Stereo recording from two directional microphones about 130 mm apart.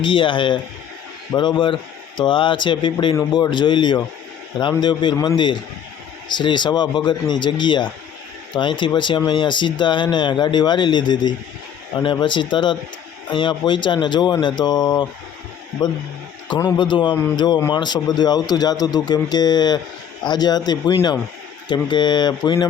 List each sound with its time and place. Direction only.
0.0 s speech: 40° left (ahead or behind)